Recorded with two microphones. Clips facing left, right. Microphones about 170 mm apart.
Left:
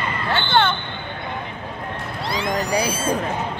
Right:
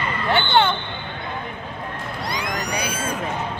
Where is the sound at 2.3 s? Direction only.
25° left (ahead or behind).